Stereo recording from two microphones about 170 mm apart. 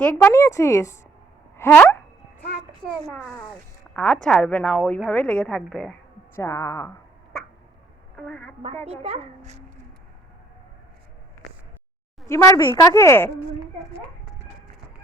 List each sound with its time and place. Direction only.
0.0 s a woman's voice: 15° left (ahead or behind)
1.5 s a sound: 15° left (ahead or behind)
2.8 s a woman's voice: 5° left (ahead or behind)
6.3 s a woman's voice: 15° left (ahead or behind)
8.1 s a woman's voice: 10° left (ahead or behind)
8.8 s a child's voice: 40° right (ahead or behind)
12.3 s a woman's voice: 15° left (ahead or behind)